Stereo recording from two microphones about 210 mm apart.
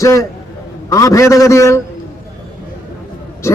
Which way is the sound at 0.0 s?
15° left (ahead or behind).